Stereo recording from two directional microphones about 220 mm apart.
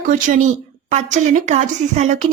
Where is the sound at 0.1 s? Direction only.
35° right (ahead or behind).